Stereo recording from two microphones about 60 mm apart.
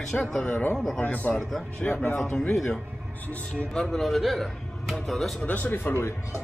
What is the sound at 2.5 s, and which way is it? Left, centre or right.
A man's voice, centre.